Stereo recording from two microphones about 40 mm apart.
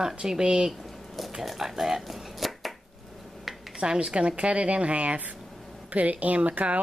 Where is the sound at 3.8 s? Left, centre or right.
Right.